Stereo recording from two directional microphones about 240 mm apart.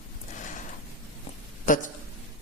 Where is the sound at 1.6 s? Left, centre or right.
Left.